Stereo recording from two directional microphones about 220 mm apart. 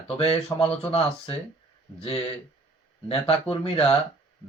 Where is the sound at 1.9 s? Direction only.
25° left (ahead or behind).